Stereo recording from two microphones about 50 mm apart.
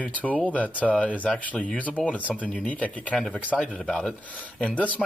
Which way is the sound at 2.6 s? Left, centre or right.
Left.